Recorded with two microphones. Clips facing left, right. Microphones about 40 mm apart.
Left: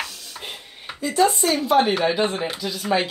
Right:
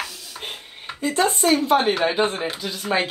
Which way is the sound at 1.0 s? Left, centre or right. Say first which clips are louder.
Left 1 dB; right.